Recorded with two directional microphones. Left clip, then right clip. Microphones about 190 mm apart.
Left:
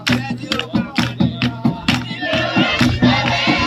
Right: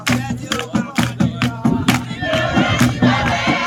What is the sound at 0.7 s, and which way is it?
Music, 25° right (ahead or behind).